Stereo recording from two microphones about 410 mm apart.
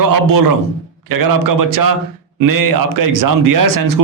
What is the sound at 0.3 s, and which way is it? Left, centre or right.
A man's voice, right.